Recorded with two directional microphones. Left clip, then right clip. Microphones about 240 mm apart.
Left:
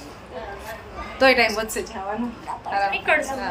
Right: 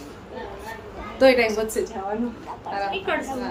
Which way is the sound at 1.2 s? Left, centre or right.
Centre.